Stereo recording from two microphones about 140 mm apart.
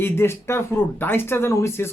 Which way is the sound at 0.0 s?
15° left (ahead or behind).